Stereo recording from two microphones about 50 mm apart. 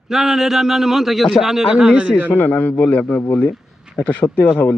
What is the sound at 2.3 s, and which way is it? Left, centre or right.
Speech, left.